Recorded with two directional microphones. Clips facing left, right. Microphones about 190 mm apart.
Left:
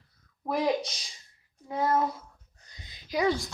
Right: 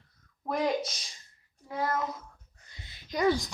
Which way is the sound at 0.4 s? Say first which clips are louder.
Left 2 dB; centre (ahead or behind).